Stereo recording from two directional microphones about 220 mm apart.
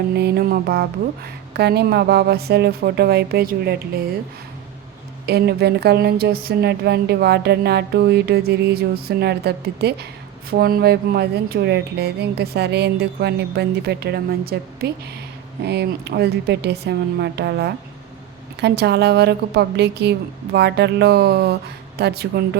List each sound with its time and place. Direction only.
0.2 s speech: 45° right (ahead or behind)
5.2 s speech: 50° right (ahead or behind)